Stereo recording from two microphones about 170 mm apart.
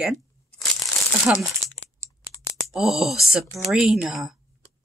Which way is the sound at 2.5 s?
Centre (ahead or behind).